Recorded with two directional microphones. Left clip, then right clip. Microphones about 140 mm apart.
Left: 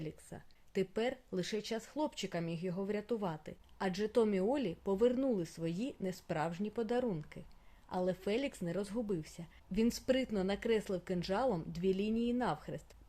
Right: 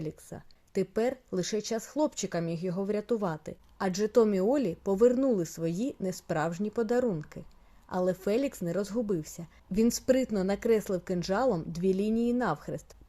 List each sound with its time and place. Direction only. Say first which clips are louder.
0.0 s speech: right 7 dB; 30° right (ahead or behind)